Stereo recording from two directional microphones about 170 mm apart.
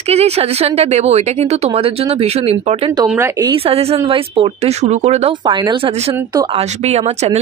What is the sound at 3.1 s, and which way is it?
Speech, 15° right (ahead or behind).